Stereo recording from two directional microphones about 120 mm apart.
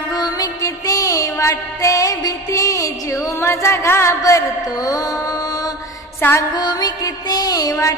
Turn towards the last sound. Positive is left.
turn(degrees=30)  # may be behind; listen again after turning